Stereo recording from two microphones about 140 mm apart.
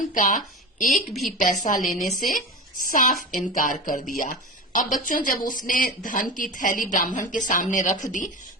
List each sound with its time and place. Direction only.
0.1 s a woman's voice: 65° left (ahead or behind)
2.0 s a woman's voice: centre (ahead or behind)
2.8 s a woman's voice: 75° left (ahead or behind)